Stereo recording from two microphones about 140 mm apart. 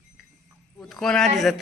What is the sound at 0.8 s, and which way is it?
Speech, 5° left (ahead or behind).